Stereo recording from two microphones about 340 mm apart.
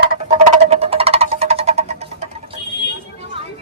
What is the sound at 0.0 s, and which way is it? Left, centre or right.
Music, centre.